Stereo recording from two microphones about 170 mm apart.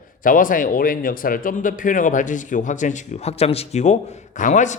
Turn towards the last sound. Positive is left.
turn(degrees=45)  # may be behind; listen again after turning